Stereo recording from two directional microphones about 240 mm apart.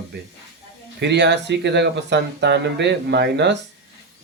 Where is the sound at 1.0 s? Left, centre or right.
Right.